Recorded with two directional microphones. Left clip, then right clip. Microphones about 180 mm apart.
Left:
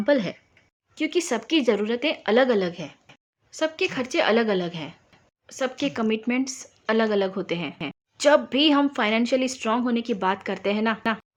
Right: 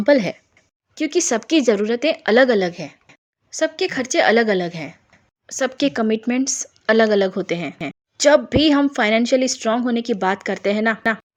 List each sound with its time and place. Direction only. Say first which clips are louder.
0.0 s speech: right 6 dB; 25° right (ahead or behind)